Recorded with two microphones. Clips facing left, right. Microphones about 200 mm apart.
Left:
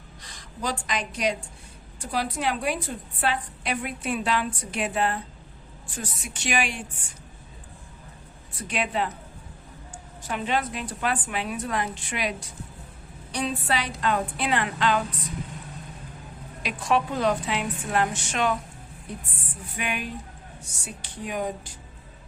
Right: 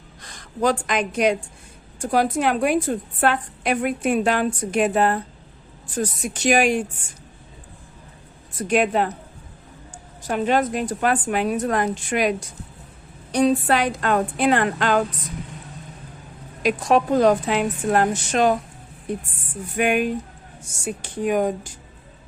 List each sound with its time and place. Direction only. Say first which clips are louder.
0.2 s a woman's voice: right 11 dB; 50° right (ahead or behind)
8.5 s a woman's voice: right 8 dB; 45° right (ahead or behind)
16.6 s a woman's voice: right 7 dB; 45° right (ahead or behind)
19.7 s a woman's voice: right 11 dB; 50° right (ahead or behind)